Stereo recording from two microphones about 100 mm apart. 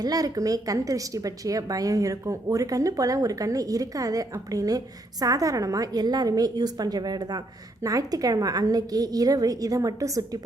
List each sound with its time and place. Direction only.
0.0 s a woman's voice: 40° right (ahead or behind)